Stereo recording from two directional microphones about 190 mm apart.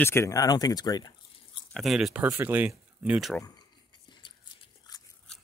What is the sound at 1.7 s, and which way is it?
Speech, centre (ahead or behind).